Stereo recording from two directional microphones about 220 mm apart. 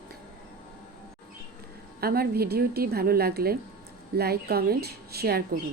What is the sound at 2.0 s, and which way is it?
A woman's voice, 45° right (ahead or behind).